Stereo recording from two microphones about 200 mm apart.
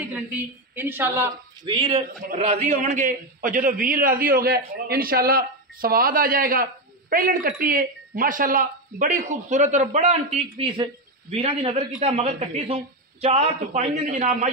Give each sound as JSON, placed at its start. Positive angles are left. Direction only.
{"t": 0.7, "sound": "a woman's voice", "side_deg": -10}
{"t": 1.7, "sound": "a man's voice", "side_deg": -25}